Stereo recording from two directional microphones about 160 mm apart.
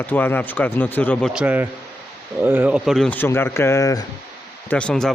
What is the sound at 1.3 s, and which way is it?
Speech, 10° right (ahead or behind).